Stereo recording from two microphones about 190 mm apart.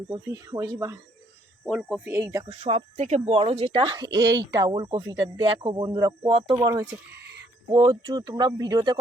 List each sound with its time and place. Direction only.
0.1 s speech: 20° right (ahead or behind)
1.7 s speech: centre (ahead or behind)
2.1 s speech: 15° right (ahead or behind)
2.5 s speech: 35° right (ahead or behind)
7.1 s a sound: 60° right (ahead or behind)
7.7 s speech: 20° right (ahead or behind)